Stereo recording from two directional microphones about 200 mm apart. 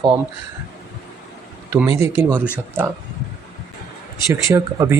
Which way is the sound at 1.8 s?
15° right (ahead or behind).